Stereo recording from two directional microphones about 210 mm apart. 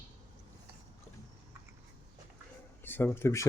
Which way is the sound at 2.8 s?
10° left (ahead or behind).